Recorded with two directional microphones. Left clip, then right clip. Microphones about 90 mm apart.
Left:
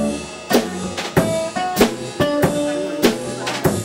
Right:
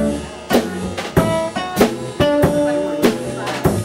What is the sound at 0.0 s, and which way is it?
Music, 5° left (ahead or behind).